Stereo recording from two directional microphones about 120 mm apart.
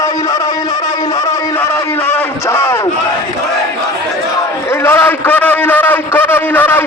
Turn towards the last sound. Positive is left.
turn(degrees=15)  # may be behind; listen again after turning